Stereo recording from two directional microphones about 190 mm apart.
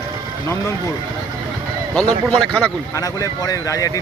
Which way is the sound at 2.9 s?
20° left (ahead or behind).